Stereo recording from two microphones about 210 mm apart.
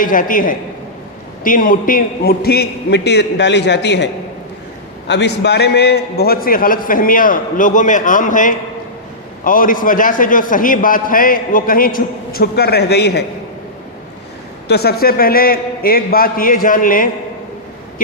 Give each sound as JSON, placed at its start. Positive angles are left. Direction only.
{"t": 0.0, "sound": "a man's voice", "side_deg": 40}
{"t": 14.7, "sound": "a man's voice", "side_deg": 50}